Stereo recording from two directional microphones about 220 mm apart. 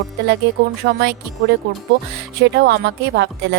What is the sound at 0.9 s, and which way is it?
Speech, 50° right (ahead or behind).